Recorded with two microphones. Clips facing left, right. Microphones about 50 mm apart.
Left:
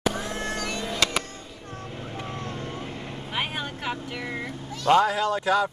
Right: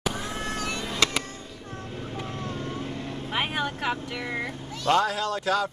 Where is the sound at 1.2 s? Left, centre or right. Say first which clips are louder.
Right 1 dB; centre.